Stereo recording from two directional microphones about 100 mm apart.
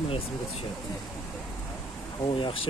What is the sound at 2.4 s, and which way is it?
Speech, 65° left (ahead or behind).